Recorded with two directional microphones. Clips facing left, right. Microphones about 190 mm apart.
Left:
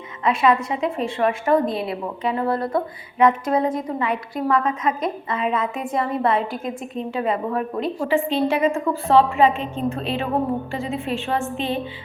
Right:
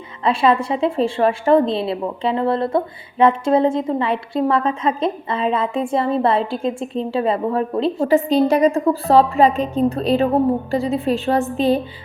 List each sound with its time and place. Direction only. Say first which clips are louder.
0.3 s a woman's voice: right 2 dB; 30° right (ahead or behind)